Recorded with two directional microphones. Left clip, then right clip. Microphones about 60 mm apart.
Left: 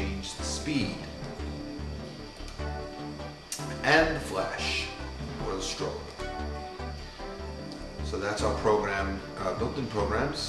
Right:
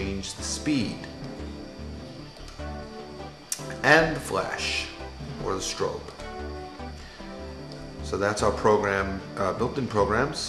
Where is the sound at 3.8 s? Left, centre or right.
Right.